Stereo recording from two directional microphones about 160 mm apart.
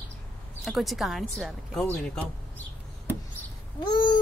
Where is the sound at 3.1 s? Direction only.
15° right (ahead or behind).